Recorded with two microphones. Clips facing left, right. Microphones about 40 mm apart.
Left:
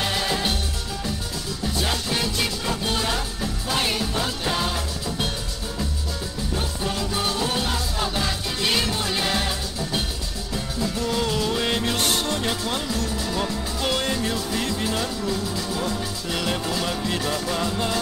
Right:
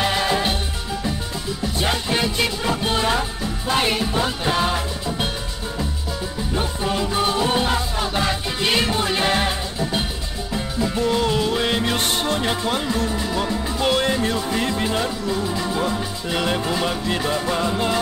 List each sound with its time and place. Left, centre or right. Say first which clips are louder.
0.0 s music: right 4 dB; centre
1.8 s music: right 4 dB; right
6.5 s music: right 5 dB; centre